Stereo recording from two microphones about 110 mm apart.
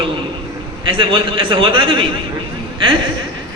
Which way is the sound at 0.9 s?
50° right (ahead or behind).